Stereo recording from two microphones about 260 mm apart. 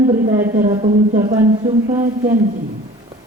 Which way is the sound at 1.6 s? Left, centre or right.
Centre.